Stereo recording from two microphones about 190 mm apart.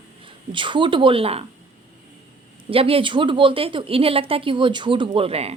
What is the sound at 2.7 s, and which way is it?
A woman's voice, 30° right (ahead or behind).